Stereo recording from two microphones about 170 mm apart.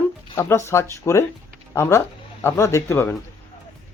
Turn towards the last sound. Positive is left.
turn(degrees=15)  # may be behind; listen again after turning